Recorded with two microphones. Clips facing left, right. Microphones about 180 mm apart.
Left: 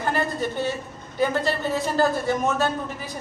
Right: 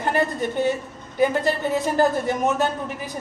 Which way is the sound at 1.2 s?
15° right (ahead or behind).